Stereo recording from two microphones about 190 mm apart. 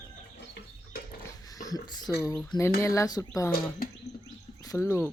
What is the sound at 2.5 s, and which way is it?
Speech, 15° left (ahead or behind).